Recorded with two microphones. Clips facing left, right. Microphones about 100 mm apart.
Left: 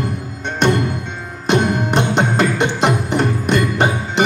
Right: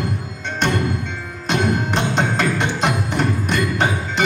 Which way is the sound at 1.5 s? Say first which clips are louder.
Left 4 dB; 20° left (ahead or behind).